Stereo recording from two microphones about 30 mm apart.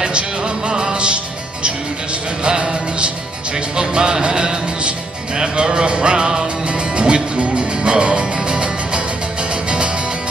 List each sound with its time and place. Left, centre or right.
0.7 s music: right